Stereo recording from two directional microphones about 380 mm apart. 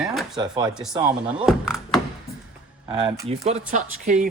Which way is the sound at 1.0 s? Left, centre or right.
Centre.